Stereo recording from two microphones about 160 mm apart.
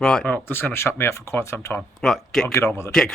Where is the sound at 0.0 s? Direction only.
5° left (ahead or behind).